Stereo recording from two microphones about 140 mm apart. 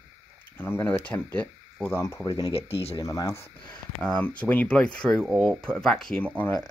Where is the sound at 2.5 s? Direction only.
45° left (ahead or behind).